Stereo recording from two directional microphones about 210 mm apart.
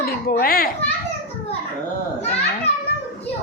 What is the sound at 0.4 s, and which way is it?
Speech, 45° left (ahead or behind).